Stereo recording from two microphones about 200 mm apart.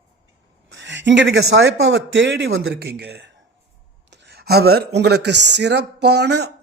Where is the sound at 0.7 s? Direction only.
65° right (ahead or behind).